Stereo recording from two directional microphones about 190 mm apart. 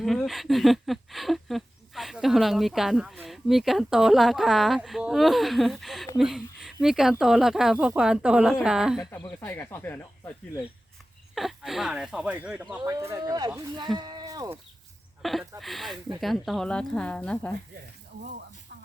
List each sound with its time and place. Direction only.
0.0 s speech: centre (ahead or behind)
9.4 s speech: 10° left (ahead or behind)
11.3 s speech: centre (ahead or behind); by 13.5 s 20° right (ahead or behind)
14.0 s a sound: 20° right (ahead or behind)
15.2 s speech: centre (ahead or behind)